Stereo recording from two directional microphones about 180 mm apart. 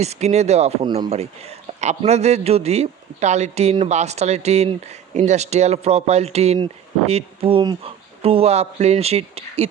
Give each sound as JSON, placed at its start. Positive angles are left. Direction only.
{"t": 0.0, "sound": "a man's voice", "side_deg": -35}